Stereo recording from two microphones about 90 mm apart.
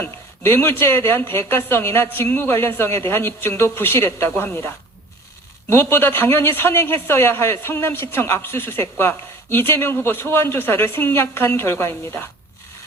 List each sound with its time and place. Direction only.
0.0 s speech: 25° left (ahead or behind)